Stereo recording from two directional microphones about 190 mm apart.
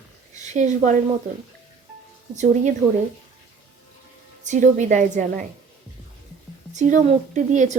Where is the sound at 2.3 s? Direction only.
40° right (ahead or behind).